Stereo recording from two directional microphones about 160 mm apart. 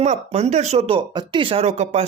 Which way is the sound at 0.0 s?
45° right (ahead or behind).